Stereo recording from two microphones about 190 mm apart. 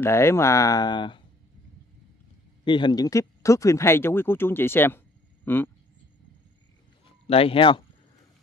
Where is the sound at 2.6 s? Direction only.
25° left (ahead or behind).